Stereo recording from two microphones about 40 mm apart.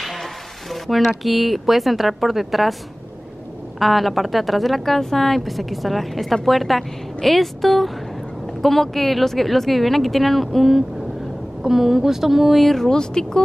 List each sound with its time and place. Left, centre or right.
0.0 s speech: centre
3.8 s a woman's voice: centre
12.6 s speech: centre
12.9 s speech: centre